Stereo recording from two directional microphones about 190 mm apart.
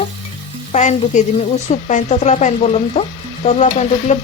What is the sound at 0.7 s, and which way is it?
Speech, 40° left (ahead or behind).